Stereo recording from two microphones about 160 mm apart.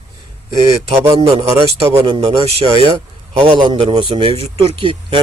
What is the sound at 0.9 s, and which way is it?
Speech, 35° right (ahead or behind).